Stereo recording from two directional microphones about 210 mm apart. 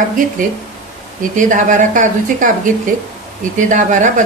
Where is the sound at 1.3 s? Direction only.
35° right (ahead or behind).